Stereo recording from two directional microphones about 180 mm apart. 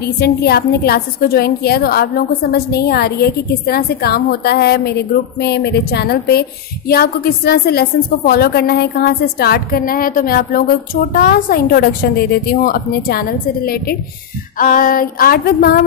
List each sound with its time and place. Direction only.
0.2 s a woman's voice: 60° left (ahead or behind)